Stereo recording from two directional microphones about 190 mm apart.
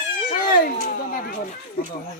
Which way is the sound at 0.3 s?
45° left (ahead or behind).